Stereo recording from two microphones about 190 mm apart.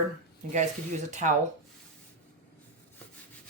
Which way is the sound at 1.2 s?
40° right (ahead or behind).